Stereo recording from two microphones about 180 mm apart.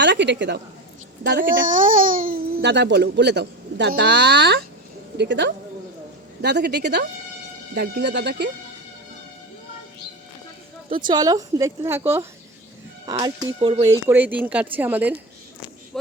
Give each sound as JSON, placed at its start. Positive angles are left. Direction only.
{"t": 0.0, "sound": "a woman's voice", "side_deg": -80}
{"t": 1.5, "sound": "speech", "side_deg": -50}
{"t": 11.0, "sound": "speech", "side_deg": -25}
{"t": 13.6, "sound": "speech", "side_deg": -30}
{"t": 13.8, "sound": "speech", "side_deg": -15}